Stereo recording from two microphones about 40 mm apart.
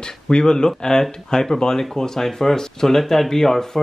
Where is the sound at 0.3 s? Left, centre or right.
Centre.